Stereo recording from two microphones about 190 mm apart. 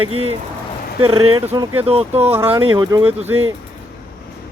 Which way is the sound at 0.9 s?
25° right (ahead or behind).